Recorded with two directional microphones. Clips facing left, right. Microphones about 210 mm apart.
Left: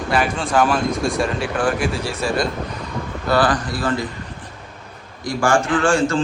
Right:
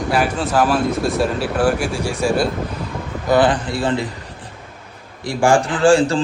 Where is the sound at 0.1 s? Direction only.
5° right (ahead or behind).